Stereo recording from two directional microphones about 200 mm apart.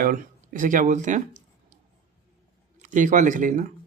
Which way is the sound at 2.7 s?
40° right (ahead or behind).